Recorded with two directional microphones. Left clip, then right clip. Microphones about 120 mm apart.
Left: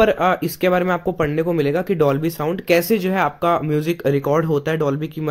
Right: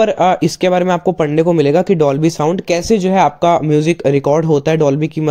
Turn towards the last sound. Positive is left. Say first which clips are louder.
# right 8 dB
turn(degrees=-35)  # may be behind; listen again after turning